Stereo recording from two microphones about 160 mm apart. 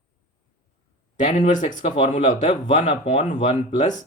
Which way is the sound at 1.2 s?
50° left (ahead or behind).